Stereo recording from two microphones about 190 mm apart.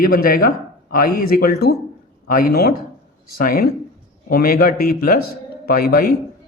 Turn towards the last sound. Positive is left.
turn(degrees=50)  # may be behind; listen again after turning